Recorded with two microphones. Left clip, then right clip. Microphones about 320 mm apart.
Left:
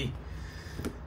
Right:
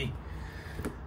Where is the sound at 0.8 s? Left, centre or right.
Centre.